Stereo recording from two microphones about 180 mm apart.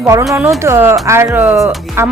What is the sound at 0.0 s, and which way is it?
A woman's voice, 15° right (ahead or behind).